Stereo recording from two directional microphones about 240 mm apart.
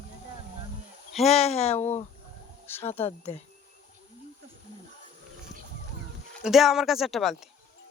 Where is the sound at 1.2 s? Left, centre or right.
Left.